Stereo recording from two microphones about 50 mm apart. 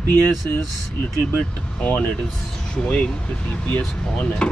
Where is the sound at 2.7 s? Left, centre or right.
Left.